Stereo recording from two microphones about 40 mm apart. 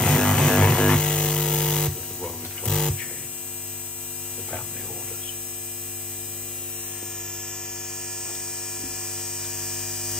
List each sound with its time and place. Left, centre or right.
0.0 s music: left
2.2 s a sound: left
8.8 s mains hum: centre